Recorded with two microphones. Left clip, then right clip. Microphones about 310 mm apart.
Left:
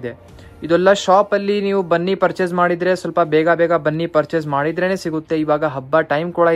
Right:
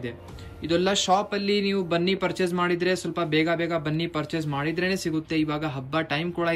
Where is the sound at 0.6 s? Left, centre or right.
Centre.